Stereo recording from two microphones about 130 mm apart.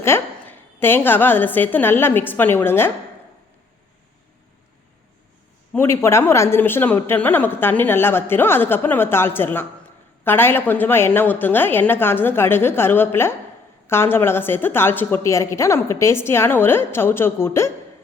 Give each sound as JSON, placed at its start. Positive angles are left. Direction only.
{"t": 0.0, "sound": "a woman's voice", "side_deg": 20}
{"t": 5.7, "sound": "a woman's voice", "side_deg": 20}